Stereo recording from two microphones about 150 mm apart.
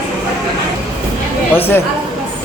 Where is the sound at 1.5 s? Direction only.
15° left (ahead or behind).